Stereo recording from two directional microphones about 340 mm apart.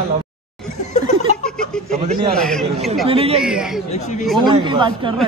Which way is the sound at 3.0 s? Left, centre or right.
Centre.